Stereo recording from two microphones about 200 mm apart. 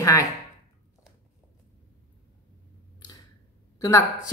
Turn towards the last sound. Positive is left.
turn(degrees=15)  # may be behind; listen again after turning